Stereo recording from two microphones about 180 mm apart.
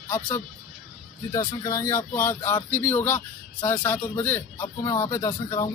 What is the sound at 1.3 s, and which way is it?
Speech, 20° left (ahead or behind).